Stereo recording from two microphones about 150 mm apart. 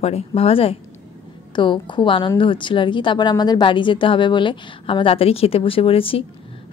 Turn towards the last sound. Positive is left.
turn(degrees=40)  # may be behind; listen again after turning